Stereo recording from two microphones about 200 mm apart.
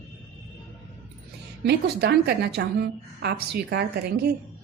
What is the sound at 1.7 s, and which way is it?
A woman's voice, 55° right (ahead or behind).